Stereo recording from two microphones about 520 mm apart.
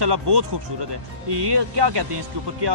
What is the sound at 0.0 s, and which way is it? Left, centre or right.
Speech, right.